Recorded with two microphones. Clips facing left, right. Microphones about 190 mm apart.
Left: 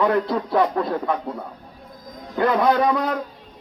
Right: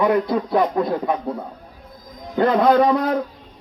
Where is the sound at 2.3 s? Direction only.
25° right (ahead or behind).